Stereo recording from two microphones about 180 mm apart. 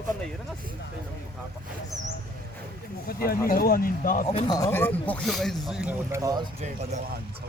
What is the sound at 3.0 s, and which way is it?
A man's voice, 55° left (ahead or behind).